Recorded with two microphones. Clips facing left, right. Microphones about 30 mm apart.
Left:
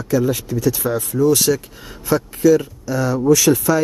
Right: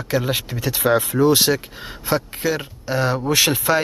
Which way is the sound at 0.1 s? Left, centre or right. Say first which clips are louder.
Left 4 dB; right.